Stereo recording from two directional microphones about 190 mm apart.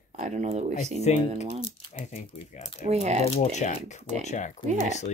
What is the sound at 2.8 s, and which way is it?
Speech, 35° right (ahead or behind).